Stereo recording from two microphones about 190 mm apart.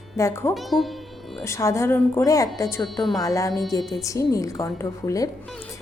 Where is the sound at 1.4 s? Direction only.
15° left (ahead or behind).